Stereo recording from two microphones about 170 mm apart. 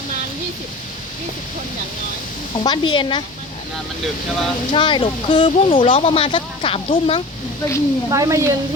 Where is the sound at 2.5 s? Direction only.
25° left (ahead or behind).